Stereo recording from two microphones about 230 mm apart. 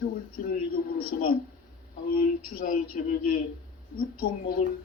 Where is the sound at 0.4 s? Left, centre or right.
Left.